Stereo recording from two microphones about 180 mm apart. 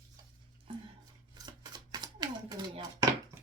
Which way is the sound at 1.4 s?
25° right (ahead or behind).